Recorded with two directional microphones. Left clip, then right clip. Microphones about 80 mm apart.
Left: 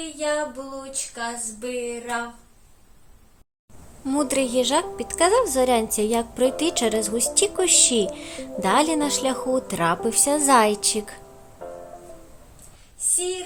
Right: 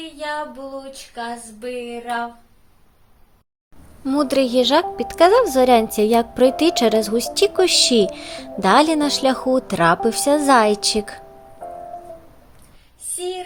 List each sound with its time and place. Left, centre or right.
0.0 s female singing: left
4.0 s speech: right
13.0 s a sound: left